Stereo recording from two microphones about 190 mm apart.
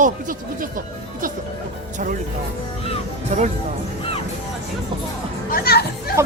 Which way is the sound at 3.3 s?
40° right (ahead or behind).